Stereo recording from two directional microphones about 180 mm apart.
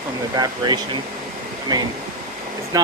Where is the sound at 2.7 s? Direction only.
15° right (ahead or behind).